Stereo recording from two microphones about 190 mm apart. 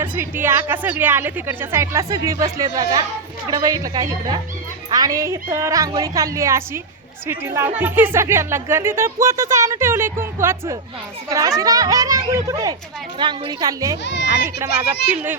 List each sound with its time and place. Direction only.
0.0 s a woman's voice: 10° right (ahead or behind)